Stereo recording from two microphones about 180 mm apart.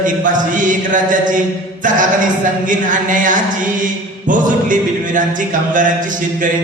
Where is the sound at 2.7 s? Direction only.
45° right (ahead or behind).